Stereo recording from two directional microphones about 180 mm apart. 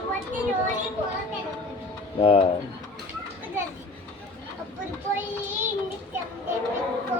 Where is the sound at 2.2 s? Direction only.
30° left (ahead or behind).